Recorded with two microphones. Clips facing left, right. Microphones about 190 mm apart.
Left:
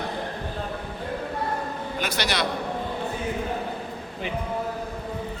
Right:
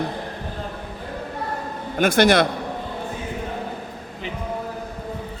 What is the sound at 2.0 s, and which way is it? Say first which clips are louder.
Speech: right 12 dB; 50° right (ahead or behind).